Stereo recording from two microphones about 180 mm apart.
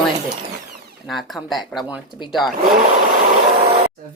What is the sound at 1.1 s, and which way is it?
Speech, centre (ahead or behind).